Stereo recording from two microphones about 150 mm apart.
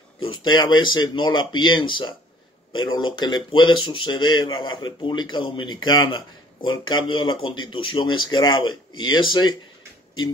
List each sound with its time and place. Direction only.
0.2 s speech: 35° left (ahead or behind)